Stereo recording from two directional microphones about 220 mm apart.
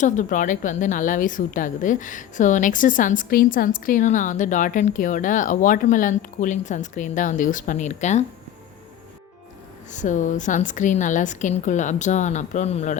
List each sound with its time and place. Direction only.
0.0 s a woman's voice: 35° left (ahead or behind)
9.9 s a woman's voice: 35° left (ahead or behind)